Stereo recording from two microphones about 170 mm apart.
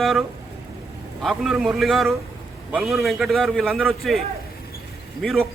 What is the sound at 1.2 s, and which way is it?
A man's voice, centre (ahead or behind).